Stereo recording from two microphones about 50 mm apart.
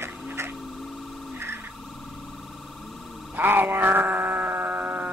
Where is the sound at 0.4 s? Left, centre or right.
Right.